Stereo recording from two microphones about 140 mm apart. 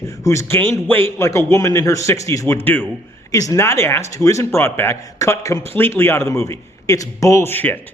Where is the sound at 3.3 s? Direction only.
25° left (ahead or behind).